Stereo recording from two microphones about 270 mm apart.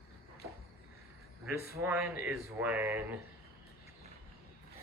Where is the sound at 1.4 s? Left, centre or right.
Centre.